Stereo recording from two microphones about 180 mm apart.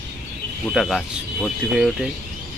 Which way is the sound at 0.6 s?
Centre (ahead or behind).